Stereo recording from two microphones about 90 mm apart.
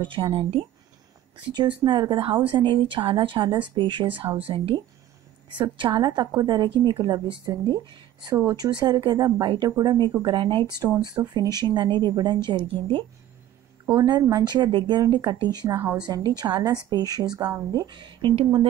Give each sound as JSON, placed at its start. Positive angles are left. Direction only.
{"t": 0.0, "sound": "speech", "side_deg": -70}
{"t": 1.5, "sound": "a woman's voice", "side_deg": -55}
{"t": 4.4, "sound": "speech", "side_deg": -85}
{"t": 5.5, "sound": "a woman's voice", "side_deg": -60}
{"t": 10.2, "sound": "a woman's voice", "side_deg": -65}
{"t": 11.3, "sound": "a woman's voice", "side_deg": -50}
{"t": 13.9, "sound": "a woman's voice", "side_deg": -50}
{"t": 15.0, "sound": "a woman's voice", "side_deg": -50}